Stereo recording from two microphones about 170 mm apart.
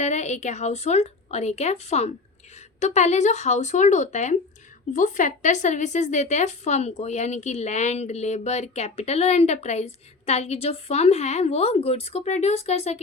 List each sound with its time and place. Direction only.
0.0 s speech: 45° left (ahead or behind)